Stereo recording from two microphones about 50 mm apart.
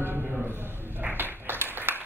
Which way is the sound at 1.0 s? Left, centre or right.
Right.